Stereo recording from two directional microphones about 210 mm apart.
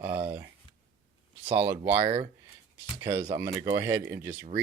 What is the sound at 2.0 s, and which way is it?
Speech, 25° right (ahead or behind).